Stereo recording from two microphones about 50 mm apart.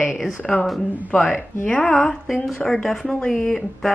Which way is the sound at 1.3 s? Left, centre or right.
Left.